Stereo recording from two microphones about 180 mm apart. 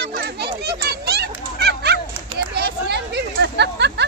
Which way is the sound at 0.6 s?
65° right (ahead or behind).